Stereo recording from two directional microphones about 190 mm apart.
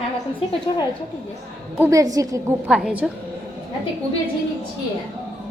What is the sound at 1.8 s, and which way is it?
A woman's voice, 15° right (ahead or behind).